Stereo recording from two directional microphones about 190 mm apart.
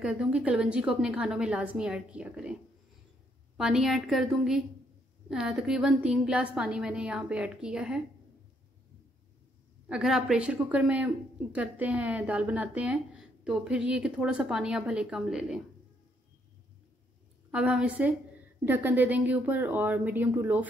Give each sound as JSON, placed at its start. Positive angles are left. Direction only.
{"t": 0.0, "sound": "a woman's voice", "side_deg": -5}
{"t": 3.5, "sound": "a woman's voice", "side_deg": -5}
{"t": 9.8, "sound": "a woman's voice", "side_deg": -5}
{"t": 17.5, "sound": "a woman's voice", "side_deg": -5}